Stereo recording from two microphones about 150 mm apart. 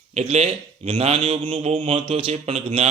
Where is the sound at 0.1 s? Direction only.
45° right (ahead or behind).